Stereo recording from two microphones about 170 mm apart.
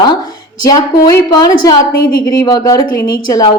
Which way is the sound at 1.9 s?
60° left (ahead or behind).